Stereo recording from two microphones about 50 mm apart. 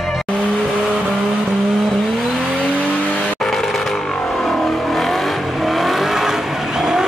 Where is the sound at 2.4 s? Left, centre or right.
Centre.